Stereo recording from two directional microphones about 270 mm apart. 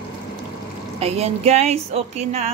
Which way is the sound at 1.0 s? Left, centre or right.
Right.